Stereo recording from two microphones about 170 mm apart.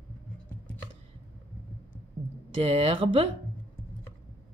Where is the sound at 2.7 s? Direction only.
30° right (ahead or behind).